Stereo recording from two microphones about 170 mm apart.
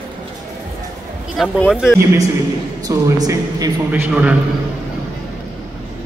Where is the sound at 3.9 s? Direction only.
10° right (ahead or behind).